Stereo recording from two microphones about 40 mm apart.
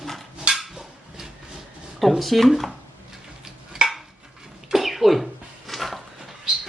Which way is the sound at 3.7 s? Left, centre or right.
Centre.